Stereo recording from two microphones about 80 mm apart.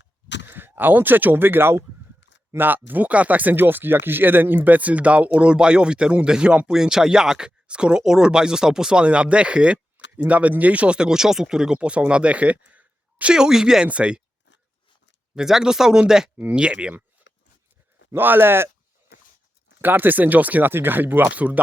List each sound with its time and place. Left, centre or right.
0.4 s speech: right
13.3 s speech: centre
15.4 s speech: centre
18.1 s a sound: right
19.8 s speech: right